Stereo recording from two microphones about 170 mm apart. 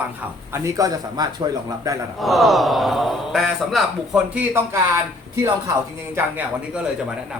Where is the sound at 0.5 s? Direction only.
15° right (ahead or behind).